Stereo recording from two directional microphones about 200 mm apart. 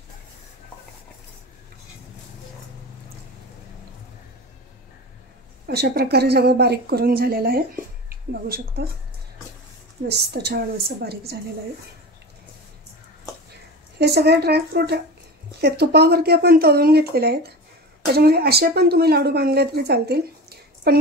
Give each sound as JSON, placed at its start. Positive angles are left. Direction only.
{"t": 5.7, "sound": "a woman's voice", "side_deg": -50}
{"t": 10.0, "sound": "speech", "side_deg": -55}
{"t": 13.9, "sound": "a woman's voice", "side_deg": -55}